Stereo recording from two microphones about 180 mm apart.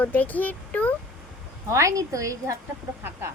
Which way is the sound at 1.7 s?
15° right (ahead or behind).